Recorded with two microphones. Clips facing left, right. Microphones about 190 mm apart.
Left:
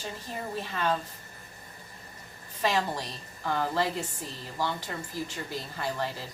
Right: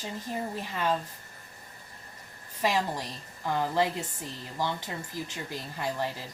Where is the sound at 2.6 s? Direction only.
15° right (ahead or behind).